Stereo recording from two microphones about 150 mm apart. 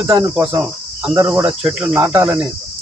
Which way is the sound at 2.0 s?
15° right (ahead or behind).